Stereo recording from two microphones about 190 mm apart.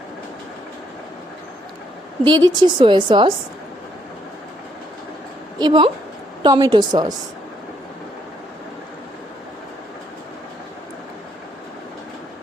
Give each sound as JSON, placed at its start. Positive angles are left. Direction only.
{"t": 2.2, "sound": "a woman's voice", "side_deg": -25}
{"t": 5.5, "sound": "a woman's voice", "side_deg": -25}